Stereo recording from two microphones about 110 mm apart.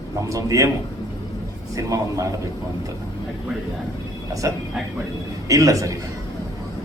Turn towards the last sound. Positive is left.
turn(degrees=-30)  # may be behind; listen again after turning